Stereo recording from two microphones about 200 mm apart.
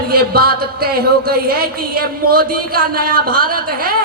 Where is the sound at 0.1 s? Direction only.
50° right (ahead or behind).